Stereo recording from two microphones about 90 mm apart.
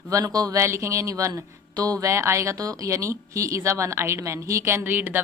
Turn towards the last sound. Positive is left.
turn(degrees=-20)  # may be behind; listen again after turning